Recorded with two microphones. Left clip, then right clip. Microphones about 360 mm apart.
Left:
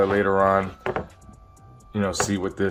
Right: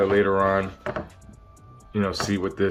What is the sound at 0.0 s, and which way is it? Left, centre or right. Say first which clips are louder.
Speech: left 1 dB; centre.